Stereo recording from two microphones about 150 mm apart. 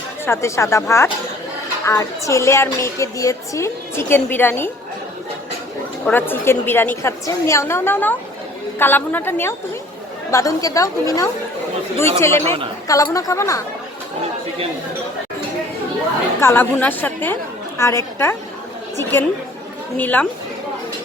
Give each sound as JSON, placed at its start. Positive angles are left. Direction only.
{"t": 0.3, "sound": "a woman's voice", "side_deg": 20}
{"t": 6.1, "sound": "a woman's voice", "side_deg": 15}
{"t": 16.4, "sound": "a woman's voice", "side_deg": 15}
{"t": 20.0, "sound": "a woman's voice", "side_deg": 10}